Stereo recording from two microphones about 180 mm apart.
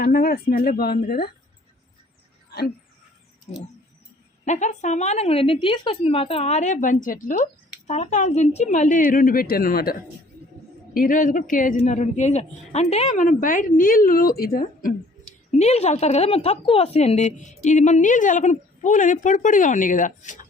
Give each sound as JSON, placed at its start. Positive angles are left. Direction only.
{"t": 0.0, "sound": "speech", "side_deg": 55}
{"t": 3.5, "sound": "a woman's voice", "side_deg": 40}
{"t": 15.5, "sound": "a woman's voice", "side_deg": 35}